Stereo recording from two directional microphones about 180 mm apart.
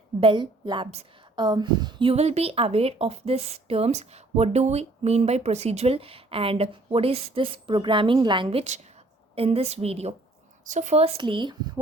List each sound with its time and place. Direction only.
0.2 s a woman's voice: 30° right (ahead or behind)